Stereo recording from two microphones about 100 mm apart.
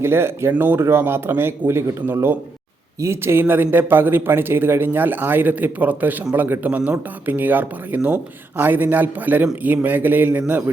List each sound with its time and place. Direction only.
0.0 s a man's voice: 25° right (ahead or behind)